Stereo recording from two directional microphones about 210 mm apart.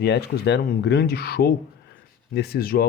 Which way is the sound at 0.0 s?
55° left (ahead or behind).